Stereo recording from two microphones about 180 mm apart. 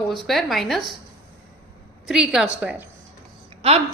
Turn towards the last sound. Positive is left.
turn(degrees=-35)  # may be behind; listen again after turning